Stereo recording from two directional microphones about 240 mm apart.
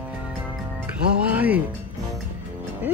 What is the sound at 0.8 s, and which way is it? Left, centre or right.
Music, centre.